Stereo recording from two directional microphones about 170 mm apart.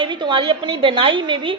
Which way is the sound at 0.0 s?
30° right (ahead or behind).